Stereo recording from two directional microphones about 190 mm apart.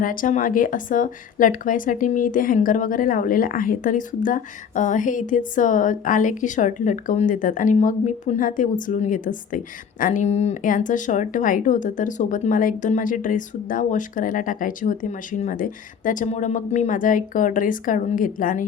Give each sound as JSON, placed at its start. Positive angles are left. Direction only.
{"t": 0.0, "sound": "a woman's voice", "side_deg": 45}